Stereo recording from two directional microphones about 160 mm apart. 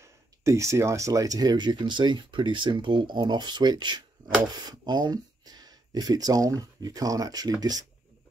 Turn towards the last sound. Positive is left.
turn(degrees=-25)  # may be behind; listen again after turning